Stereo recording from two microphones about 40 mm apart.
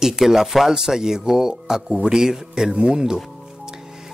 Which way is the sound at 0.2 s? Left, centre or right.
Centre.